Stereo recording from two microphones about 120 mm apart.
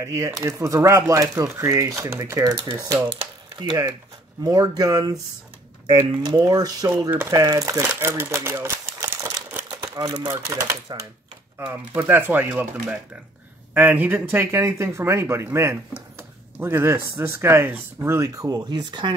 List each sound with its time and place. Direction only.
0.0 s speech: 25° right (ahead or behind)
3.1 s a sound: 45° right (ahead or behind)
4.4 s speech: 35° right (ahead or behind)
6.2 s speech: 30° right (ahead or behind)
7.8 s typewriter: 15° right (ahead or behind)
9.9 s speech: 30° right (ahead or behind); by 12.6 s 15° right (ahead or behind)
13.7 s speech: 15° right (ahead or behind); by 19.1 s 40° right (ahead or behind)